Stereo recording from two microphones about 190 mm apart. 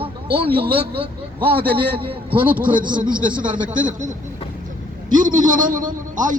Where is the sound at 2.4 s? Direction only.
10° right (ahead or behind).